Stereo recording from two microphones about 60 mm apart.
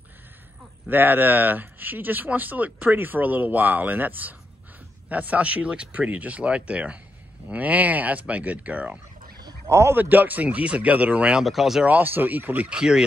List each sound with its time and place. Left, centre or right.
0.8 s speech: right
9.7 s speech: right
9.9 s speech: right
11.3 s speech: centre
11.9 s speech: right
12.6 s speech: centre